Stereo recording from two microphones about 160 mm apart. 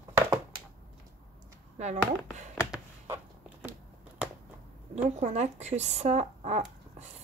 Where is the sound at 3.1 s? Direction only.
10° right (ahead or behind).